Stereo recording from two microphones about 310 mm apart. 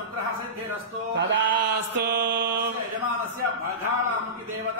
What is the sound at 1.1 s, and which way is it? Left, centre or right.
Mantra, right.